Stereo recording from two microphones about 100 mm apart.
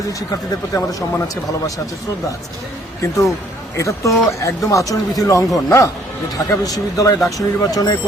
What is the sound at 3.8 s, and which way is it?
Speech, 30° left (ahead or behind).